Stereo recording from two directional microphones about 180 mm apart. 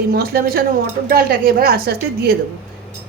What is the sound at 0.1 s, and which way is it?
A woman's voice, 55° right (ahead or behind).